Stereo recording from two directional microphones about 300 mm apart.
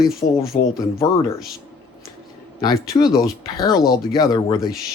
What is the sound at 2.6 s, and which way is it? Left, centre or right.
A man's voice, centre.